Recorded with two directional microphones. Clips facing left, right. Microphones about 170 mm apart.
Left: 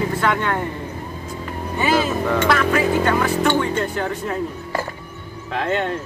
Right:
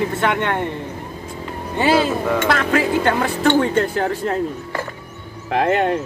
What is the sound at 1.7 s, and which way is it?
Speech, 30° right (ahead or behind).